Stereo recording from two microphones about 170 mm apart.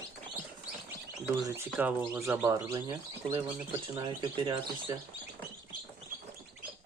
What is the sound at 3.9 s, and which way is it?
Speech, 25° right (ahead or behind).